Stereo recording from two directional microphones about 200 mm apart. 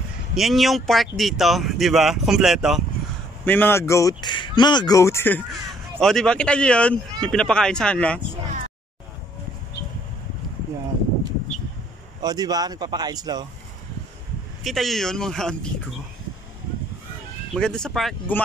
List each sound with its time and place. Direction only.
0.3 s speech: centre (ahead or behind)
3.4 s speech: 10° left (ahead or behind)
12.2 s speech: 20° right (ahead or behind)
14.6 s speech: centre (ahead or behind)
17.6 s speech: 5° left (ahead or behind)